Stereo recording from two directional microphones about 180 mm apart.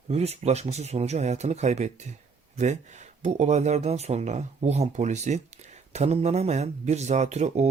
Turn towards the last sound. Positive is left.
turn(degrees=-40)  # may be behind; listen again after turning